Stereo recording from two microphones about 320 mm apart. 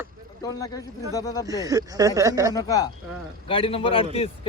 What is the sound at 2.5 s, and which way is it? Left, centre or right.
A man's voice, centre.